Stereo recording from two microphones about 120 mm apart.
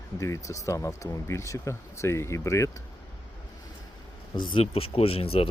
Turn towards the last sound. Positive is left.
turn(degrees=55)  # may be behind; listen again after turning